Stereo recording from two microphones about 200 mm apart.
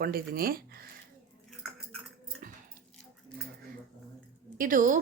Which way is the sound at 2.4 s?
40° right (ahead or behind).